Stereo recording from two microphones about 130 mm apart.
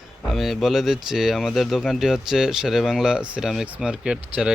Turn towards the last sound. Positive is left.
turn(degrees=-5)  # may be behind; listen again after turning